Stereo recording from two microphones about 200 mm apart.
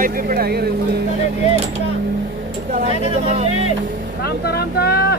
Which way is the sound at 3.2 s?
30° right (ahead or behind).